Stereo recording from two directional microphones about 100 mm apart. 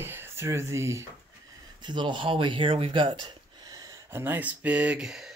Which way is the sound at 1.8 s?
50° right (ahead or behind).